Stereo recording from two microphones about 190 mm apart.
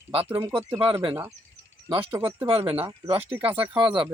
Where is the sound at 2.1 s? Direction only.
25° right (ahead or behind).